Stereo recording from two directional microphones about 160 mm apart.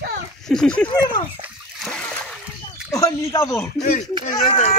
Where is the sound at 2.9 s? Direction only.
20° left (ahead or behind).